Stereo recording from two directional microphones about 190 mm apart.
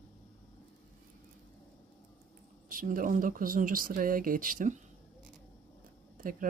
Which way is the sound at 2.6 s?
45° right (ahead or behind).